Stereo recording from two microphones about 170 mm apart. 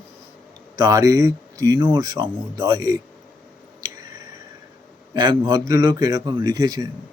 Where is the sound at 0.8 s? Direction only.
20° right (ahead or behind).